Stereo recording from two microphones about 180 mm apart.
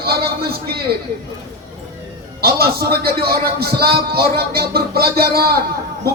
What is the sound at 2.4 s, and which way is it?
Speech, 60° right (ahead or behind).